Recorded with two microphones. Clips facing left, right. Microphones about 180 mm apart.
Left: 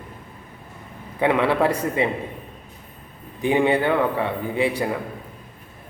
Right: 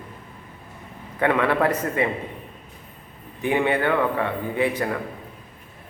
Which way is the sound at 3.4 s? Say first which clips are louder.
Left 2 dB; 15° left (ahead or behind).